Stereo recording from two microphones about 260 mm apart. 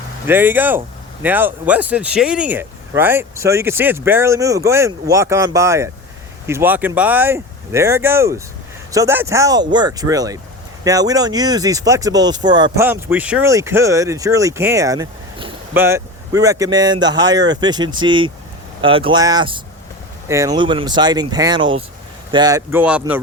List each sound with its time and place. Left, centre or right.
0.3 s speech: centre